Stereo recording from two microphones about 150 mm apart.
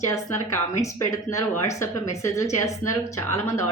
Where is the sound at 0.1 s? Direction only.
20° left (ahead or behind).